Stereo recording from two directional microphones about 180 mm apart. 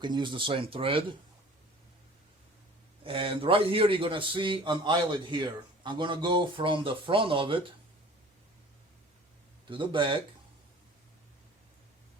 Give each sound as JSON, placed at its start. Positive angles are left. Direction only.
{"t": 0.0, "sound": "a man's voice", "side_deg": -25}
{"t": 3.0, "sound": "a man's voice", "side_deg": -30}
{"t": 9.6, "sound": "a man's voice", "side_deg": -25}